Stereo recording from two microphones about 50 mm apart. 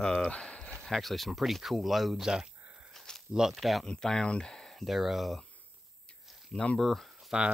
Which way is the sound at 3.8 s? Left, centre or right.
Centre.